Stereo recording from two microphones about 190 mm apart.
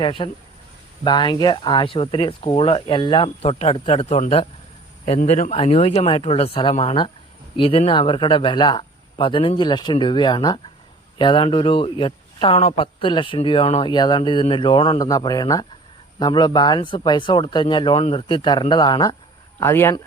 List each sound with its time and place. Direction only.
0.0 s speech: 25° left (ahead or behind)